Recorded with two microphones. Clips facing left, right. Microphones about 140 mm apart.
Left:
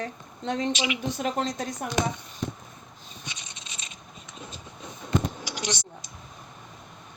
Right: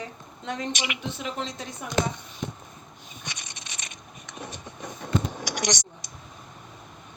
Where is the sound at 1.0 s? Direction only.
40° left (ahead or behind).